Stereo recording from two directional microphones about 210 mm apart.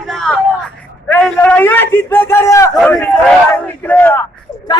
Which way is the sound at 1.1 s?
5° left (ahead or behind).